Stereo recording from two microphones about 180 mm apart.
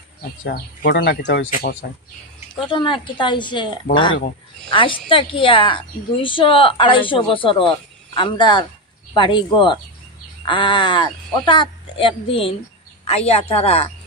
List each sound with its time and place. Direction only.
0.5 s speech: 65° left (ahead or behind)
2.7 s a woman's voice: 25° left (ahead or behind)